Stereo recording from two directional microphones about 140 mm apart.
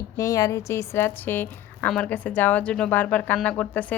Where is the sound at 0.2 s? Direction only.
25° left (ahead or behind).